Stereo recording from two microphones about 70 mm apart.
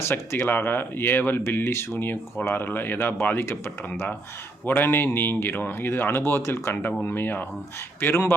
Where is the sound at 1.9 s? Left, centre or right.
Left.